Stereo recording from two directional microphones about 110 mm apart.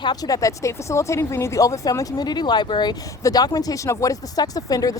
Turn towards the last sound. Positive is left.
turn(degrees=35)  # may be behind; listen again after turning